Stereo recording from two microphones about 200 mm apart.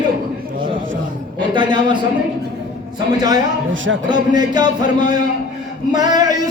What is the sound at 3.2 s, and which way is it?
Chant, 20° right (ahead or behind).